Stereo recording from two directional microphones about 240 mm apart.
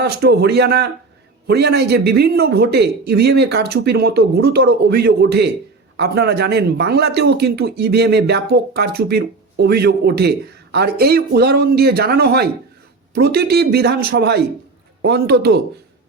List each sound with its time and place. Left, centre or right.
0.0 s speech: right